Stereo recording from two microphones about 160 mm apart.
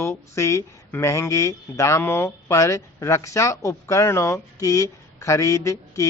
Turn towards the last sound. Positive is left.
turn(degrees=20)  # may be behind; listen again after turning